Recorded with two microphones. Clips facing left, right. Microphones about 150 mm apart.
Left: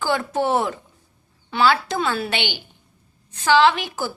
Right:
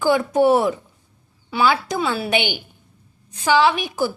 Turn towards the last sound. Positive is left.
turn(degrees=-15)  # may be behind; listen again after turning